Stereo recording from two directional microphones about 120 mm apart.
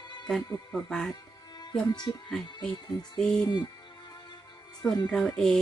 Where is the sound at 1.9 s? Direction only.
35° left (ahead or behind).